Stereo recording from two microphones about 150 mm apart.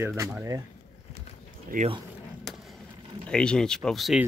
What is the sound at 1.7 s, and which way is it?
Speech, 70° right (ahead or behind).